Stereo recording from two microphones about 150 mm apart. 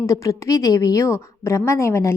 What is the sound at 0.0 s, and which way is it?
A woman's voice, 20° left (ahead or behind).